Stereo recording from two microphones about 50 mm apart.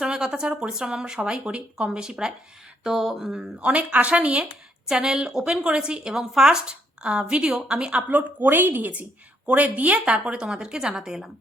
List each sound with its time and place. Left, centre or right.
0.0 s a woman's voice: centre
3.6 s a woman's voice: right
8.1 s a woman's voice: right; by 11.3 s centre